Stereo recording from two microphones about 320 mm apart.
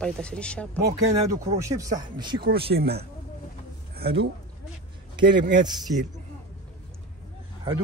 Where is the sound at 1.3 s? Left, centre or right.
Centre.